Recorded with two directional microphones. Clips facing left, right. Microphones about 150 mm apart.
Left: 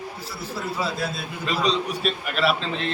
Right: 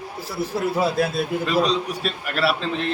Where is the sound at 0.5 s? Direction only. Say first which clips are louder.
Right 7 dB; 50° right (ahead or behind).